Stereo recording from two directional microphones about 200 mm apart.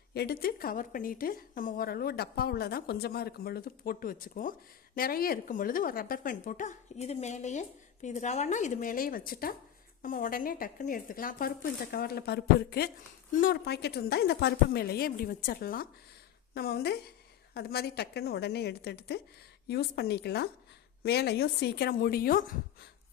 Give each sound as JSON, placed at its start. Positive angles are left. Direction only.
{"t": 0.1, "sound": "a woman's voice", "side_deg": 50}